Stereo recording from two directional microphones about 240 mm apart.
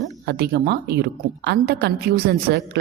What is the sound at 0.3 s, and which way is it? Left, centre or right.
A woman's voice, right.